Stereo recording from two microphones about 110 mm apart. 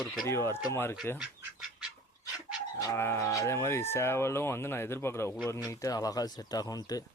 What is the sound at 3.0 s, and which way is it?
Speech, 20° left (ahead or behind).